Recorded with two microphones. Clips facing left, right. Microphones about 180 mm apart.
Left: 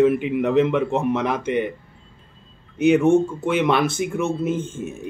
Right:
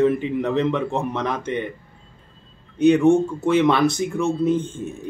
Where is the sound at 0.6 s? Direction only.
5° left (ahead or behind).